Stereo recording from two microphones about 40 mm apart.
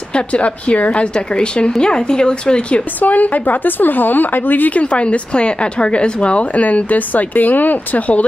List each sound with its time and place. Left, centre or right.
0.1 s speech: left
3.0 s a woman's voice: left
4.7 s speech: left